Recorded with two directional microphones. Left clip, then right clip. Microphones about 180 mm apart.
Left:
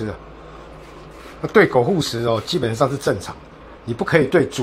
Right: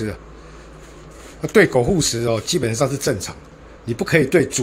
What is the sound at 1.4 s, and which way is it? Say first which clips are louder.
Speech: even; 25° right (ahead or behind).